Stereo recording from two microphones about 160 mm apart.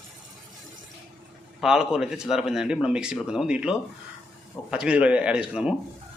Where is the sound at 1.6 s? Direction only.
5° right (ahead or behind).